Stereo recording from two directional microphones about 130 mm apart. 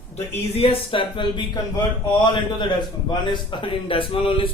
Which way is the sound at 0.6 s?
45° left (ahead or behind).